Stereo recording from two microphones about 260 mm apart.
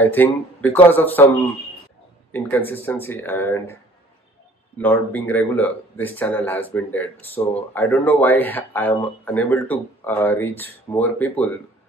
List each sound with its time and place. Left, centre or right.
0.0 s speech: centre
2.3 s speech: centre
4.7 s speech: centre